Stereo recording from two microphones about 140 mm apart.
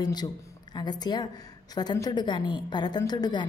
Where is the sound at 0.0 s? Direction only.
30° left (ahead or behind).